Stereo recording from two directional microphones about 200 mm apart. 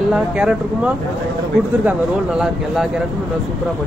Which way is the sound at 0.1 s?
5° right (ahead or behind).